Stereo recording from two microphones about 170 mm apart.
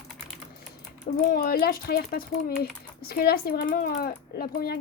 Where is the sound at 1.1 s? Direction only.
65° left (ahead or behind).